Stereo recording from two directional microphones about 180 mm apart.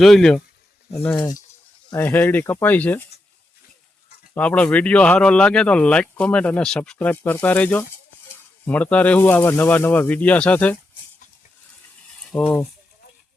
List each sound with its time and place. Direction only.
0.0 s speech: centre (ahead or behind)
2.0 s speech: 10° left (ahead or behind)
4.4 s speech: 5° left (ahead or behind)
12.1 s mechanisms: 5° left (ahead or behind)